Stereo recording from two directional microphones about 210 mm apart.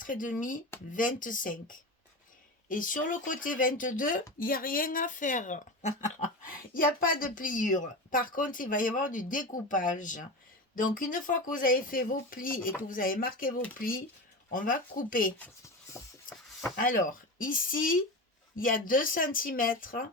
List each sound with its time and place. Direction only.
0.0 s speech: 40° left (ahead or behind)
15.4 s speech: 15° left (ahead or behind)
16.7 s speech: 40° left (ahead or behind)